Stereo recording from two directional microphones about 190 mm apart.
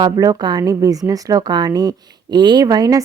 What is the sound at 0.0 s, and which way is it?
Speech, 20° right (ahead or behind).